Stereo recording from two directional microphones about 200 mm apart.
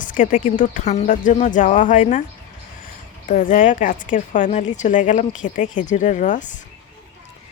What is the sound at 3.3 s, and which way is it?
A woman's voice, 40° left (ahead or behind).